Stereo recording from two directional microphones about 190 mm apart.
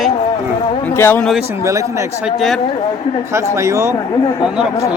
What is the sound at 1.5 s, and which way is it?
Speech, 15° right (ahead or behind).